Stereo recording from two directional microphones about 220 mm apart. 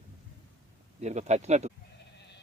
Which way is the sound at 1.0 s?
30° right (ahead or behind).